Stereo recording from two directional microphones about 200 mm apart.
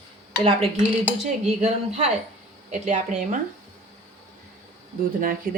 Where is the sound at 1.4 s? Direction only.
35° right (ahead or behind).